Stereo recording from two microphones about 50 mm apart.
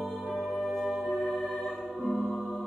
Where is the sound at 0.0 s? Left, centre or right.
Centre.